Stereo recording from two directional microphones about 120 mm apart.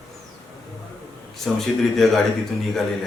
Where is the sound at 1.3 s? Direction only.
Centre (ahead or behind).